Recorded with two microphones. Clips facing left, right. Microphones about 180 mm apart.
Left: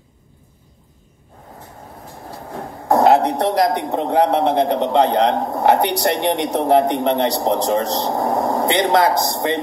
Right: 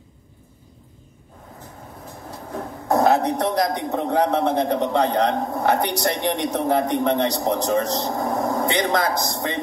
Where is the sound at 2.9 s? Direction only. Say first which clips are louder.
Left 4 dB; 75° left (ahead or behind).